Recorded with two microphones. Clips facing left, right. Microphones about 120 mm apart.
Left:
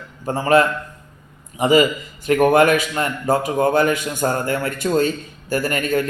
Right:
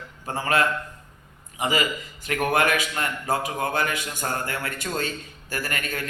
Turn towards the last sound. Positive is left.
turn(degrees=35)  # may be behind; listen again after turning